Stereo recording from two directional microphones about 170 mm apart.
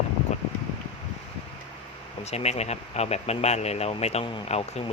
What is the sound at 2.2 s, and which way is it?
Speech, 40° left (ahead or behind).